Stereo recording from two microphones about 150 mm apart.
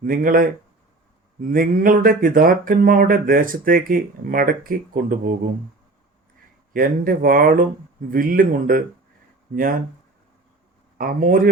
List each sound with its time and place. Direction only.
0.0 s speech: 70° right (ahead or behind)
6.7 s speech: 70° right (ahead or behind)
10.9 s speech: 70° right (ahead or behind)